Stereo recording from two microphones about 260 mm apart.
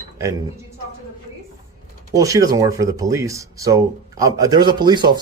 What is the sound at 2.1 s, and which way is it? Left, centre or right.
Speech, centre.